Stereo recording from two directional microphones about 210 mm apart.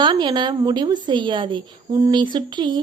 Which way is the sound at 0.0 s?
20° right (ahead or behind).